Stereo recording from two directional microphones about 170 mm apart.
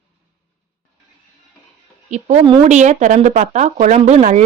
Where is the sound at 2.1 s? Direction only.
45° right (ahead or behind).